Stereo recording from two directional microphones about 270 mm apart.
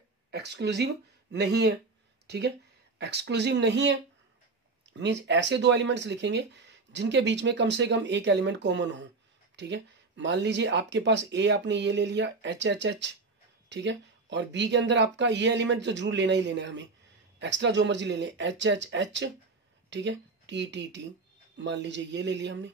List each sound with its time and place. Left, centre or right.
0.3 s speech: right